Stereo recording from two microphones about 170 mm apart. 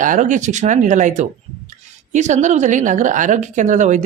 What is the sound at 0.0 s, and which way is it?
Speech, 50° right (ahead or behind).